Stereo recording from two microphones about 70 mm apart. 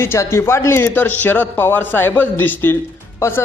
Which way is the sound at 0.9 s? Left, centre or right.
Left.